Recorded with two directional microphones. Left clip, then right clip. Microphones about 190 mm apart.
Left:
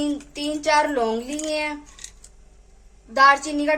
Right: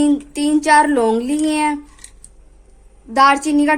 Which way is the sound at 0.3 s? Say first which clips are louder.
Right 7 dB; 55° right (ahead or behind).